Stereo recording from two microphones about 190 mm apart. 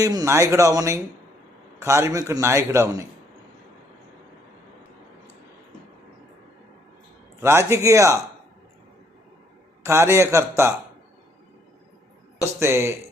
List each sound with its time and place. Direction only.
0.0 s a man's voice: 20° right (ahead or behind)
7.4 s a man's voice: 15° right (ahead or behind)
9.8 s a man's voice: 15° right (ahead or behind)
12.5 s a man's voice: 15° right (ahead or behind)